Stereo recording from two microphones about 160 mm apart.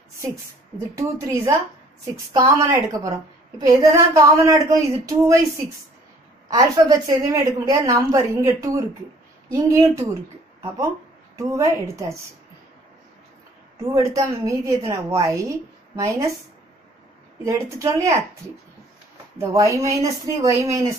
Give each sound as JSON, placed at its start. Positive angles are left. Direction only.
{"t": 0.9, "sound": "a woman's voice", "side_deg": -20}
{"t": 2.6, "sound": "a woman's voice", "side_deg": -20}
{"t": 6.5, "sound": "a woman's voice", "side_deg": -25}
{"t": 11.3, "sound": "a woman's voice", "side_deg": -20}
{"t": 13.9, "sound": "a woman's voice", "side_deg": -20}
{"t": 17.5, "sound": "a woman's voice", "side_deg": -20}
{"t": 19.3, "sound": "a woman's voice", "side_deg": -15}